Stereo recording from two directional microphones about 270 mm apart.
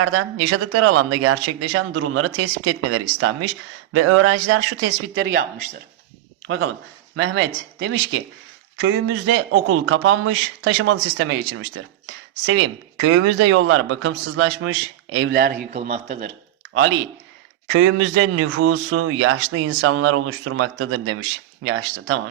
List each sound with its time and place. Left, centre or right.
0.0 s a man's voice: right
7.2 s a man's voice: right
17.7 s a man's voice: right